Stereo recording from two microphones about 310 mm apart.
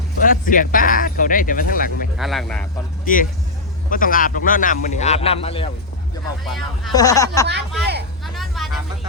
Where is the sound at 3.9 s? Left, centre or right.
Left.